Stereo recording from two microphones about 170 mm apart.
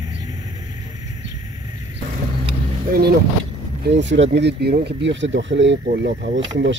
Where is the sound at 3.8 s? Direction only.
90° right.